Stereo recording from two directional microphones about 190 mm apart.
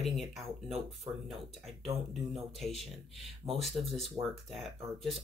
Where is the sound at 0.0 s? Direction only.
Centre (ahead or behind).